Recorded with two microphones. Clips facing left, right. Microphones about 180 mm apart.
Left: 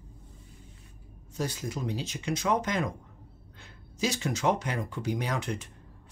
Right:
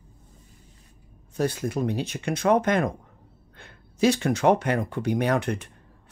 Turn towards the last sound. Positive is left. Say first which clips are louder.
# right 8 dB
turn(degrees=-60)  # may be behind; listen again after turning